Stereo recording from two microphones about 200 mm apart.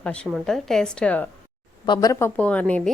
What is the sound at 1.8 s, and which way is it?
Speech, 20° left (ahead or behind).